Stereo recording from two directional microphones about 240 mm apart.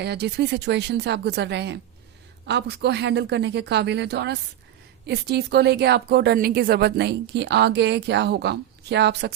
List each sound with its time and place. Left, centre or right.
0.0 s speech: right